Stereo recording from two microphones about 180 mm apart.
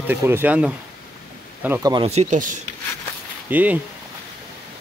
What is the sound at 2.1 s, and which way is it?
Speech, 40° right (ahead or behind).